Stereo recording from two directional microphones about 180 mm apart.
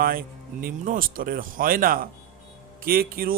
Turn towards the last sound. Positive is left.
turn(degrees=-55)  # may be behind; listen again after turning